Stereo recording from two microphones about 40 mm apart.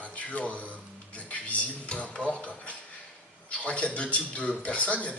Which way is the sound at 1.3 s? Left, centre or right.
Left.